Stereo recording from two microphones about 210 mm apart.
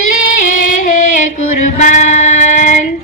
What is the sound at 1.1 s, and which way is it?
Female singing, 35° left (ahead or behind).